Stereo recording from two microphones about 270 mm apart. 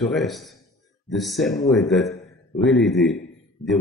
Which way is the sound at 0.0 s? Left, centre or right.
Centre.